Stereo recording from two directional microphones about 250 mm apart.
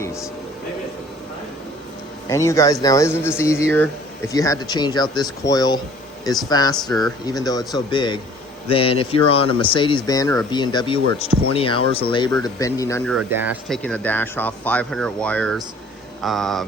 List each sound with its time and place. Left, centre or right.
0.0 s a sound: centre
2.3 s speech: centre
13.1 s speech: centre